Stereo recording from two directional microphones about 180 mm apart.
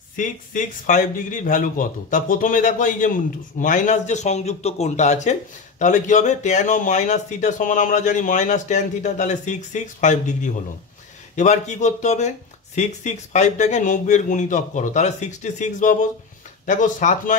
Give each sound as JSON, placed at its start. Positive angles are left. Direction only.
{"t": 0.1, "sound": "a man's voice", "side_deg": 45}